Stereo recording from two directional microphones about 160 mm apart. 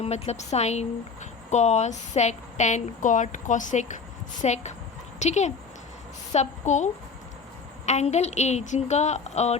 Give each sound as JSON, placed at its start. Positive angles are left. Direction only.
{"t": 0.0, "sound": "speech", "side_deg": 45}